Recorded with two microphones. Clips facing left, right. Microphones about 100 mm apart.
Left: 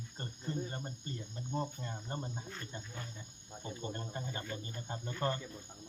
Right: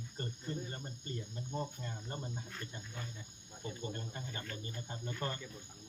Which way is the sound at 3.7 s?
30° left (ahead or behind).